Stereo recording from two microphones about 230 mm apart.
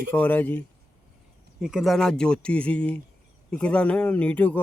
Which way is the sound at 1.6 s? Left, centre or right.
Centre.